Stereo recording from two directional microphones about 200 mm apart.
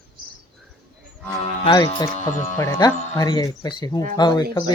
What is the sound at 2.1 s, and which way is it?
Speech, 40° left (ahead or behind).